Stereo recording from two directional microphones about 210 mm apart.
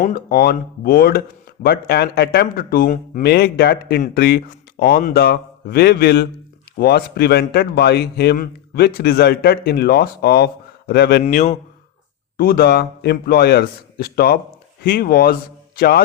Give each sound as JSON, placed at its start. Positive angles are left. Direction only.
{"t": 0.0, "sound": "a man's voice", "side_deg": 45}
{"t": 11.2, "sound": "a man's voice", "side_deg": 35}
{"t": 12.4, "sound": "a man's voice", "side_deg": 45}